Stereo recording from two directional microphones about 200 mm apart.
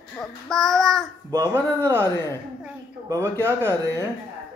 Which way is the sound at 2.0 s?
15° left (ahead or behind).